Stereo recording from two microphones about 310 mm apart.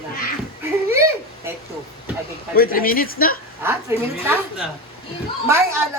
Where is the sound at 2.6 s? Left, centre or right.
Left.